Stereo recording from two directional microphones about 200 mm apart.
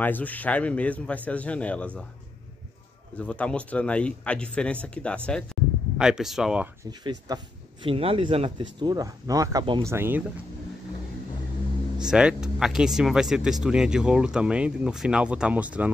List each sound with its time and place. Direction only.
0.0 s a man's voice: 10° left (ahead or behind)
3.2 s speech: 5° left (ahead or behind)
6.9 s speech: 20° right (ahead or behind)
12.0 s speech: 5° right (ahead or behind)